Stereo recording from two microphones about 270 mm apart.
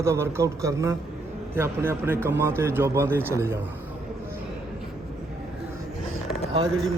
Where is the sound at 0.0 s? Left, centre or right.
Centre.